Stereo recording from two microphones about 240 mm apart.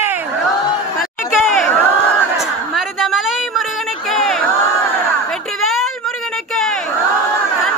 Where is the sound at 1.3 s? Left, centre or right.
Centre.